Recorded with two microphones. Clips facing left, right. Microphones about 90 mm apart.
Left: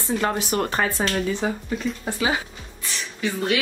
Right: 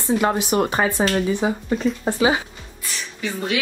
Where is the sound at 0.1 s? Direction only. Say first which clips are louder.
Right 4 dB; 15° right (ahead or behind).